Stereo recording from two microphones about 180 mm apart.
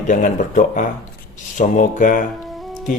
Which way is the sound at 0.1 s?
45° left (ahead or behind).